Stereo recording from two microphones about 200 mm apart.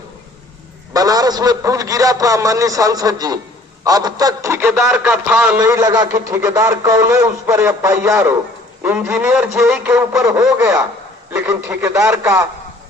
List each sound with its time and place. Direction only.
0.9 s speech: 20° right (ahead or behind)
5.5 s speech: 15° right (ahead or behind)